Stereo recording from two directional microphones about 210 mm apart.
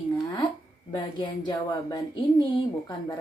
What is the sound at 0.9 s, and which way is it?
Speech, 20° left (ahead or behind).